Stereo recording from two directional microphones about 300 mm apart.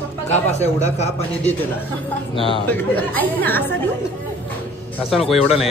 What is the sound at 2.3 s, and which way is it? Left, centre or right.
Speech, centre.